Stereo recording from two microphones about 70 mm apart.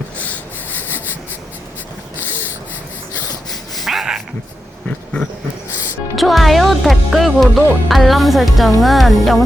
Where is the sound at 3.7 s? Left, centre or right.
Centre.